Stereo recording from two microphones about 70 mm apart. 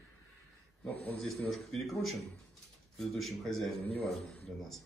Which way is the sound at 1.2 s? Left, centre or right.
Centre.